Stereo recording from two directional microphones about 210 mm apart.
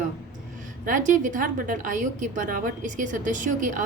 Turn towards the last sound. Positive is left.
turn(degrees=-35)  # may be behind; listen again after turning